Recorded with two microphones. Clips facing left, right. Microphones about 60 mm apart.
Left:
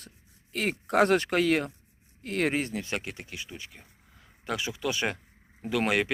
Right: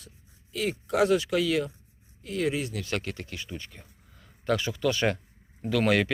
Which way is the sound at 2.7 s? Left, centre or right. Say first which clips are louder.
Right 1 dB; left.